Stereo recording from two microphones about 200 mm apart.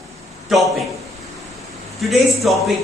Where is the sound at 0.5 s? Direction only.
Centre (ahead or behind).